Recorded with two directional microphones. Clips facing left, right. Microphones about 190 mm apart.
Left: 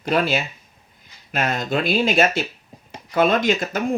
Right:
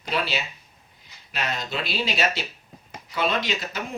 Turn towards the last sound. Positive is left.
turn(degrees=50)  # may be behind; listen again after turning